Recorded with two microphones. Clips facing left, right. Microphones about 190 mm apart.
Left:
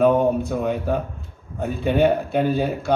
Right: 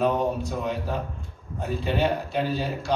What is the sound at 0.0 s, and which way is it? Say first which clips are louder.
A man's voice: left 7 dB; 55° left (ahead or behind).